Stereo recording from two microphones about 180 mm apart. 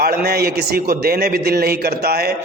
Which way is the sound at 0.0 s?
60° right (ahead or behind).